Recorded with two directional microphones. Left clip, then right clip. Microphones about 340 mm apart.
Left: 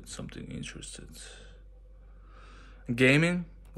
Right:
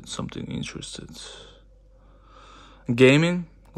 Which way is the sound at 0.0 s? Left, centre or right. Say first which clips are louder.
Right 9 dB; centre.